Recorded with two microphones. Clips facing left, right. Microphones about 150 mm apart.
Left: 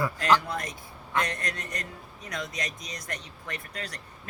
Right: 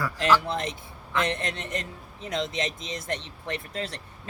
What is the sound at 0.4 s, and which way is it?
A man's voice, 25° right (ahead or behind).